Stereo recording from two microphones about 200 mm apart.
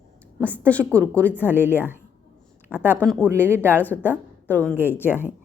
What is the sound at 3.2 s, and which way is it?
Speech, 10° right (ahead or behind).